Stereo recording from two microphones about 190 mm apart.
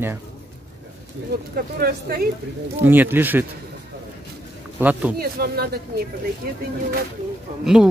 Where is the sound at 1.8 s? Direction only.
55° right (ahead or behind).